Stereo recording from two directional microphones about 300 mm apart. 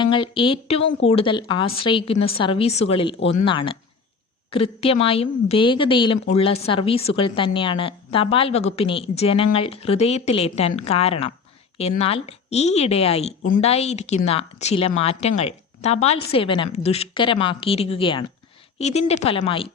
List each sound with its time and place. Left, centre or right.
0.0 s a woman's voice: centre